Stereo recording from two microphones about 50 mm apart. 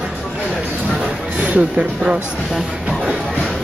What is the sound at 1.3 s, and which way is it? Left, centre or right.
Music, right.